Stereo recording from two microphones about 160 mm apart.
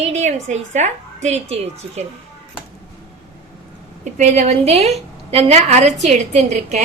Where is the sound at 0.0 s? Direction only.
45° right (ahead or behind).